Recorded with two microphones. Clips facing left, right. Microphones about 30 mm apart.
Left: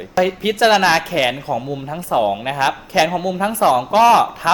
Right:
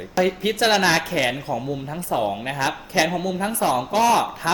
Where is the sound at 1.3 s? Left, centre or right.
Centre.